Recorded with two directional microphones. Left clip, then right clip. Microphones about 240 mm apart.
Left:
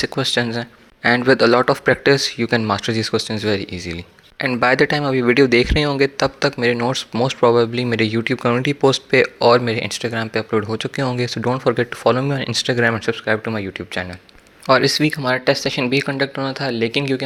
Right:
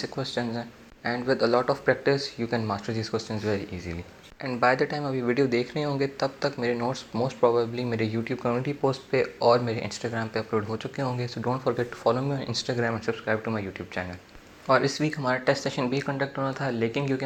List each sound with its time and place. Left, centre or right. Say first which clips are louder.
0.0 s a man's voice: left 11 dB; left